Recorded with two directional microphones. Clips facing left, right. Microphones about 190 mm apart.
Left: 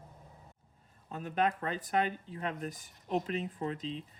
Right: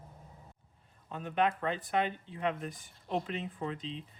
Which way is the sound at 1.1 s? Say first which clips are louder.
Right 1 dB; 40° left (ahead or behind).